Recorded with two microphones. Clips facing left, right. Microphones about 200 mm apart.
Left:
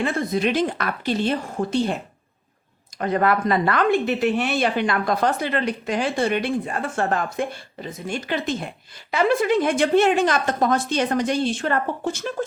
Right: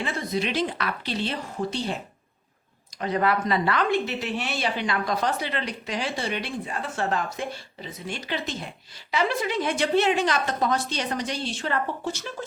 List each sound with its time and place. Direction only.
0.0 s a woman's voice: 50° left (ahead or behind)
3.0 s a woman's voice: 50° left (ahead or behind)